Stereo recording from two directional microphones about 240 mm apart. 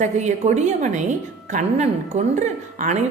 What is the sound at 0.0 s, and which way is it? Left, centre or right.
A woman's voice, right.